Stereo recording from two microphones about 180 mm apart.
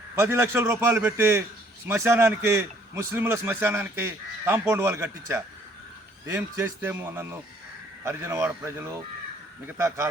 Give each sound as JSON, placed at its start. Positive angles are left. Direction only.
{"t": 0.2, "sound": "a man's voice", "side_deg": -15}